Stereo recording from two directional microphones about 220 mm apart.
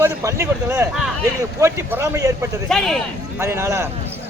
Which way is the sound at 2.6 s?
Centre (ahead or behind).